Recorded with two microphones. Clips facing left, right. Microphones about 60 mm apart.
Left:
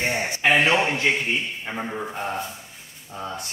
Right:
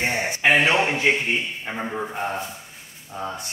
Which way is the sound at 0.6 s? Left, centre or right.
Right.